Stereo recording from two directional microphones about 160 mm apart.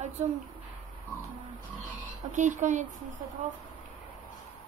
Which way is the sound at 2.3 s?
50° right (ahead or behind).